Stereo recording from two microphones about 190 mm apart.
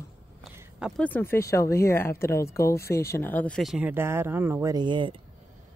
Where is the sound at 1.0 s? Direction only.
10° left (ahead or behind); by 5.1 s 25° right (ahead or behind).